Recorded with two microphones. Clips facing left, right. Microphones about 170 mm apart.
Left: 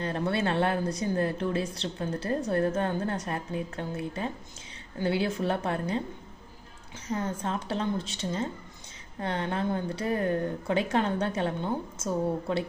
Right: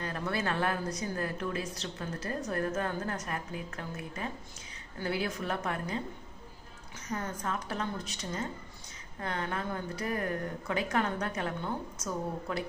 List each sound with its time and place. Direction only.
0.0 s speech: 30° left (ahead or behind)
7.1 s speech: 30° left (ahead or behind)